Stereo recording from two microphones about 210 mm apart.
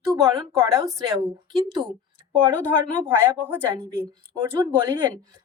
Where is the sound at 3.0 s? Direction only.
10° right (ahead or behind).